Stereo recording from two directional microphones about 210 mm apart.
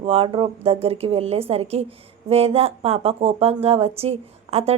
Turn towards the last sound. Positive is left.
turn(degrees=-30)  # may be behind; listen again after turning